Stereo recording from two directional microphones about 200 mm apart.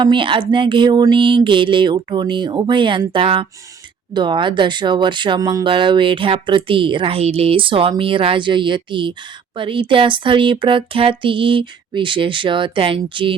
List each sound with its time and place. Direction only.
0.0 s speech: 25° right (ahead or behind)